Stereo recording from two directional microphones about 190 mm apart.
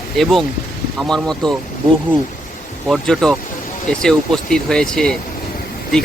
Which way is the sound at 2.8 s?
5° left (ahead or behind).